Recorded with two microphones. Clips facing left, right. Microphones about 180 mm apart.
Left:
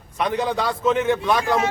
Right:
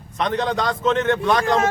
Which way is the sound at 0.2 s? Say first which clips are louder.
Right 1 dB; 10° left (ahead or behind).